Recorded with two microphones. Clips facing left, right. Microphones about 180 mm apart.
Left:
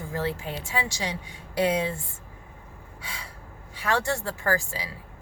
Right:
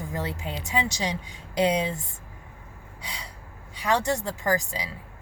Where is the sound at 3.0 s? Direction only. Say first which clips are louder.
Right 1 dB; 20° right (ahead or behind).